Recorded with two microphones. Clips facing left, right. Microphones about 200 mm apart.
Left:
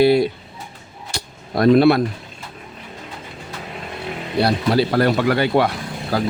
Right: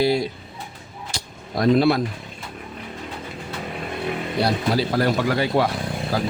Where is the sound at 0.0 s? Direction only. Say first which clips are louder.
Left 6 dB; 60° left (ahead or behind).